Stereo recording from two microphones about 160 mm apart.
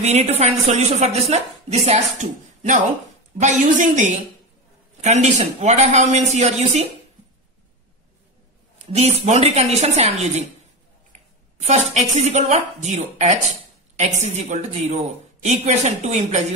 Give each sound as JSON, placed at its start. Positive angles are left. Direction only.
{"t": 0.0, "sound": "speech", "side_deg": -45}
{"t": 8.7, "sound": "a woman's voice", "side_deg": -40}
{"t": 11.6, "sound": "speech", "side_deg": -45}